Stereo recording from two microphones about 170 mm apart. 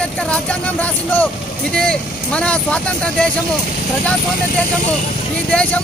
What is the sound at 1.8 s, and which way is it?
Speech, 5° left (ahead or behind).